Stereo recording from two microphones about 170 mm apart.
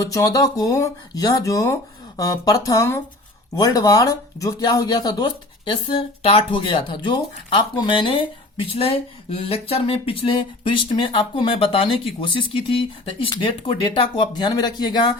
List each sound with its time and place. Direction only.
0.0 s speech: 20° left (ahead or behind)